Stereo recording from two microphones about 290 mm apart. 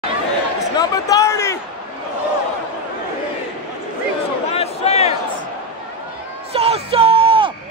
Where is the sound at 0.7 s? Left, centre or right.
Centre.